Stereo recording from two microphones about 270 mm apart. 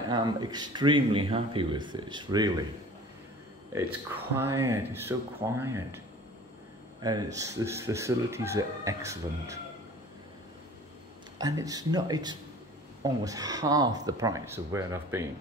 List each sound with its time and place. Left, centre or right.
0.1 s speech: centre
3.7 s speech: centre
7.0 s speech: centre
11.3 s speech: centre